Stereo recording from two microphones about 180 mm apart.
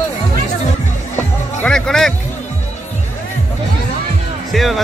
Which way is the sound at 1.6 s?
5° left (ahead or behind).